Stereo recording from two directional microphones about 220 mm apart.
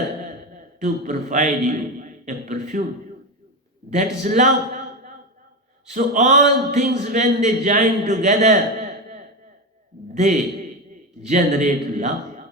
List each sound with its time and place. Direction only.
0.8 s a man's voice: 35° right (ahead or behind)
3.8 s a man's voice: 35° right (ahead or behind)
5.9 s a man's voice: 35° right (ahead or behind)